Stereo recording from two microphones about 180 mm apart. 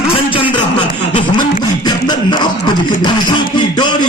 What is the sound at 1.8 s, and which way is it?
Music, 25° left (ahead or behind).